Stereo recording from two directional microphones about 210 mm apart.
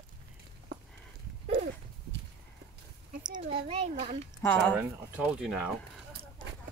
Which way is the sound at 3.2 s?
25° right (ahead or behind).